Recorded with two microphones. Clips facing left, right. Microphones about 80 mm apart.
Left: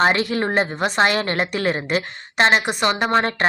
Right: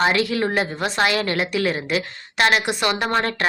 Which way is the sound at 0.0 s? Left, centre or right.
Left.